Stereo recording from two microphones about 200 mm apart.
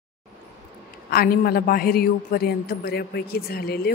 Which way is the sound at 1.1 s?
50° left (ahead or behind).